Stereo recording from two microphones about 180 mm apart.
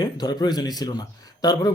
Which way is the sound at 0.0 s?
20° left (ahead or behind).